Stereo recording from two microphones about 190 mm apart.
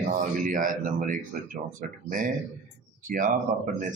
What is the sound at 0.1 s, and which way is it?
Speech, 45° right (ahead or behind).